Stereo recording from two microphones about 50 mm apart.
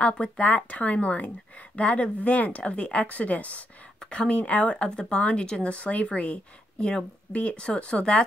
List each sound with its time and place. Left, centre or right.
0.0 s speech: left